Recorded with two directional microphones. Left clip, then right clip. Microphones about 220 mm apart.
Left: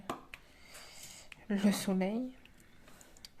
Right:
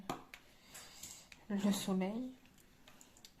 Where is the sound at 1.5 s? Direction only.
40° left (ahead or behind).